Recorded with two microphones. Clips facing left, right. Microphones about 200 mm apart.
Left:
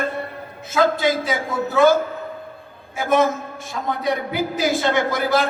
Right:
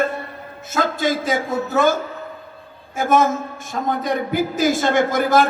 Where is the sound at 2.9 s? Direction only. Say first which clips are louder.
Right 1 dB; 45° right (ahead or behind).